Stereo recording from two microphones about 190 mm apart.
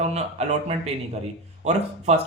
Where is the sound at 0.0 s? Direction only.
35° right (ahead or behind).